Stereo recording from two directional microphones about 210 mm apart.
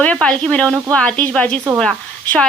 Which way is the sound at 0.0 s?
5° left (ahead or behind).